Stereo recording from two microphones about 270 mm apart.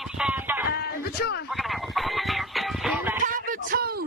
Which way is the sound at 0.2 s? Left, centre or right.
Centre.